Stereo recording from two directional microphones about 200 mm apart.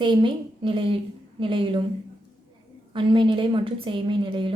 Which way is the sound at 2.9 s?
25° right (ahead or behind).